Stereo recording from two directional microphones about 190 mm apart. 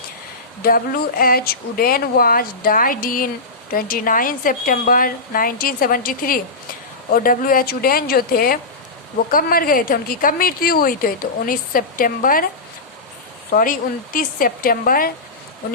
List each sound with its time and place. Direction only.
0.6 s a woman's voice: 50° left (ahead or behind)
13.5 s a woman's voice: 45° left (ahead or behind)